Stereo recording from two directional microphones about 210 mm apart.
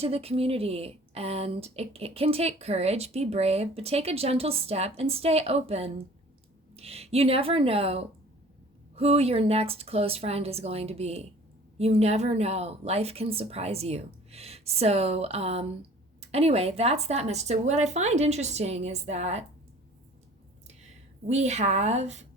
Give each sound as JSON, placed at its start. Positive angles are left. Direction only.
{"t": 0.0, "sound": "a woman's voice", "side_deg": -30}
{"t": 21.2, "sound": "speech", "side_deg": -30}